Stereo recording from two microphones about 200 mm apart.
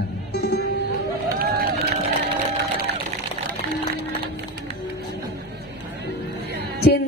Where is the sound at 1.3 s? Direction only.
50° right (ahead or behind).